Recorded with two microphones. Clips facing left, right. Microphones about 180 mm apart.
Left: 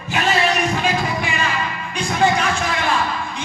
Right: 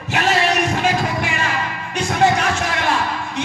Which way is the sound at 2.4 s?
70° right (ahead or behind).